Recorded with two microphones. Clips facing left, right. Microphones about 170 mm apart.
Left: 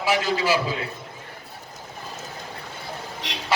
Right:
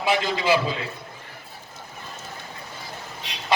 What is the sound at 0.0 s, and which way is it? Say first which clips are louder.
Speech: even; 20° right (ahead or behind).